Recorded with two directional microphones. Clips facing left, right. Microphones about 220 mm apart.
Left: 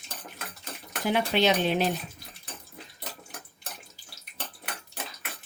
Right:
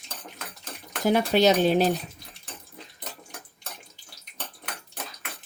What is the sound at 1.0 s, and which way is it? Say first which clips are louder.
Speech: right 4 dB; 40° right (ahead or behind).